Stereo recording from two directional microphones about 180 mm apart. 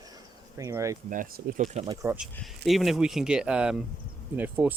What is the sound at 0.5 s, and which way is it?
Speech, 15° right (ahead or behind).